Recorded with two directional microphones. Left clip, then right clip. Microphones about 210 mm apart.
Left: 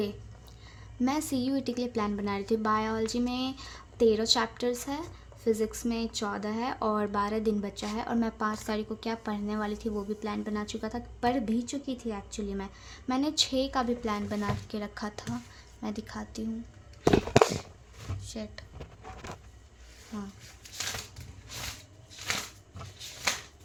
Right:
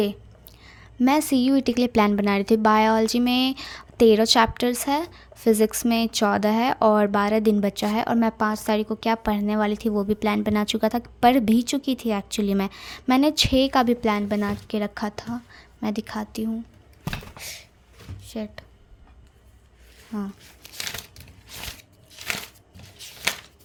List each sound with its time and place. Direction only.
0.6 s a woman's voice: 35° right (ahead or behind)
18.3 s speech: 40° right (ahead or behind)
20.1 s a woman's voice: 35° right (ahead or behind)